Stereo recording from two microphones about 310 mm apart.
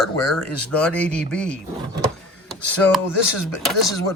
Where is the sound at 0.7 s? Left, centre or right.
Centre.